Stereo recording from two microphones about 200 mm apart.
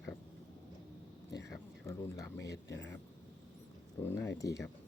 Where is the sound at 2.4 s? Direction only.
60° left (ahead or behind).